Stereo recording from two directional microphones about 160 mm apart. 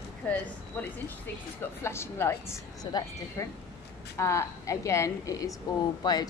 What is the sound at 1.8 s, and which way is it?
A woman's voice, 15° left (ahead or behind).